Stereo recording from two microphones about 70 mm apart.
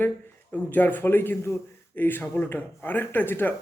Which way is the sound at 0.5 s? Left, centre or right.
Left.